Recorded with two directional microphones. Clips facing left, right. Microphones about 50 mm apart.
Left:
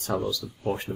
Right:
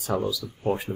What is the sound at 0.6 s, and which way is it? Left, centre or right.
Speech, right.